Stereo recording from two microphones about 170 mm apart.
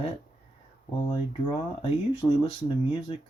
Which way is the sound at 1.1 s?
30° left (ahead or behind).